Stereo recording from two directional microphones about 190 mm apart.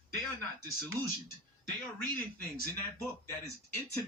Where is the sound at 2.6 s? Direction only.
15° left (ahead or behind).